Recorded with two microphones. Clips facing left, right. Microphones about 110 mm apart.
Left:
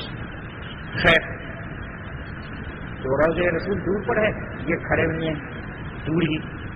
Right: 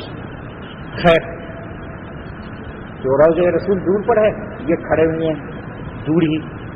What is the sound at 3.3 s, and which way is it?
A man's voice, 40° right (ahead or behind).